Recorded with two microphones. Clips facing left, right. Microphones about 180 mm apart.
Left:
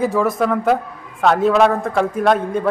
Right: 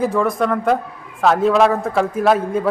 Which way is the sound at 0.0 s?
Centre (ahead or behind).